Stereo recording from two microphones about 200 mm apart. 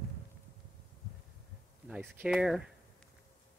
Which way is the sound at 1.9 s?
5° right (ahead or behind).